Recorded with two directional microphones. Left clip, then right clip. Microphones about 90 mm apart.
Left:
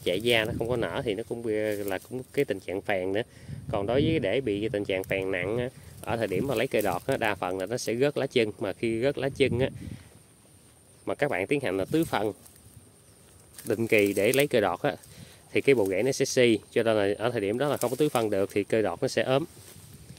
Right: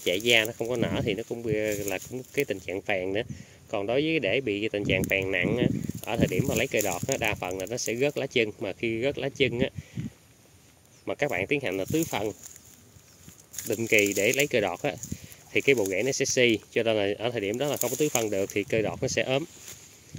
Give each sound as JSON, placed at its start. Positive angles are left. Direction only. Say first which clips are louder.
{"t": 0.0, "sound": "speech", "louder": "right 2 dB", "side_deg": 5}
{"t": 2.1, "sound": "speech", "louder": "left 2 dB", "side_deg": 15}
{"t": 11.1, "sound": "speech", "louder": "even", "side_deg": 25}
{"t": 13.7, "sound": "speech", "louder": "even", "side_deg": 20}
{"t": 14.4, "sound": "speech", "louder": "left 1 dB", "side_deg": 25}